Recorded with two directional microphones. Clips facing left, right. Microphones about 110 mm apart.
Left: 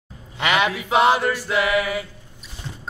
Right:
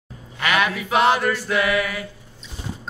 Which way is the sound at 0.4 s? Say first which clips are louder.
Left 1 dB; 20° left (ahead or behind).